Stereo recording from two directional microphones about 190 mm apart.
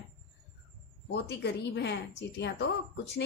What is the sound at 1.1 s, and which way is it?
A woman's voice, 65° left (ahead or behind).